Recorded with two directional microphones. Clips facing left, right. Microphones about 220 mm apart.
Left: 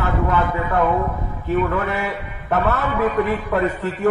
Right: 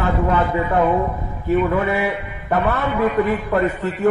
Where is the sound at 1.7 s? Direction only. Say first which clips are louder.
Right 3 dB; 15° right (ahead or behind).